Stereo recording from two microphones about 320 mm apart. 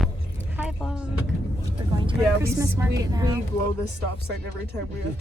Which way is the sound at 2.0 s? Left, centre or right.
Centre.